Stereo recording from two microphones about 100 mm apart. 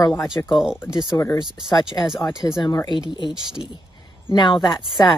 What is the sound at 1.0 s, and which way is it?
Speech, 45° left (ahead or behind).